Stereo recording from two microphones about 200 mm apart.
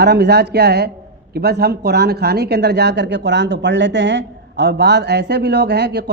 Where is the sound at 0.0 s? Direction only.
55° right (ahead or behind).